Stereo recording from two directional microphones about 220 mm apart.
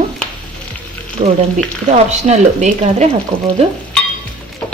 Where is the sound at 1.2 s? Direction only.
30° right (ahead or behind).